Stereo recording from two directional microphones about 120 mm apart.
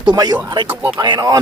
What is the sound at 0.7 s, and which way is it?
Speech, 15° right (ahead or behind).